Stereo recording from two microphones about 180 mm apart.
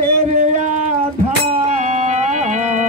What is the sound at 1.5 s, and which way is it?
Music, 40° right (ahead or behind).